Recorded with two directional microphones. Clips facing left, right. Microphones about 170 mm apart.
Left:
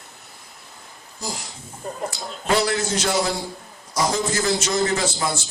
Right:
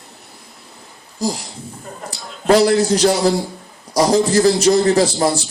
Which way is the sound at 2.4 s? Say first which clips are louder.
Right 9 dB; 35° right (ahead or behind).